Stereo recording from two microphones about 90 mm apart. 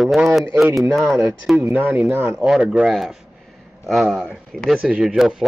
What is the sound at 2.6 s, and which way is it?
Speech, 5° right (ahead or behind).